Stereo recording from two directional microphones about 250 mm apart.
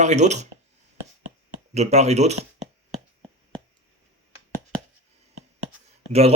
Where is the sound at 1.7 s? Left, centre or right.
Right.